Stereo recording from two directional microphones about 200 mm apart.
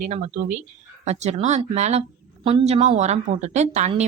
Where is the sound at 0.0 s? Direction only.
35° right (ahead or behind).